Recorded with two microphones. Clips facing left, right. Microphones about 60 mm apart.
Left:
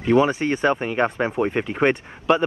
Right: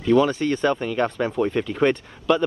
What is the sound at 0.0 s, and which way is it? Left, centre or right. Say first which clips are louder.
Speech: even; left.